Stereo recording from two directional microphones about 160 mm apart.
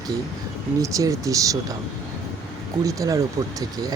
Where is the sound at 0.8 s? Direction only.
20° right (ahead or behind).